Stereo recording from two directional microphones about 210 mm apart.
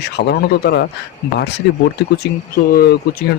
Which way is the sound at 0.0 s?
50° left (ahead or behind).